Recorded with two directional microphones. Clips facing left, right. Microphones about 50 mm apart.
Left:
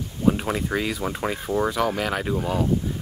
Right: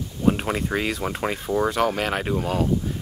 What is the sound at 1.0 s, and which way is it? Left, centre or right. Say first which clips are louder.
Speech: right 1 dB; centre.